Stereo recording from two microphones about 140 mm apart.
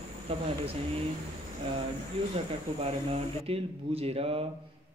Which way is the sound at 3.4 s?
45° right (ahead or behind).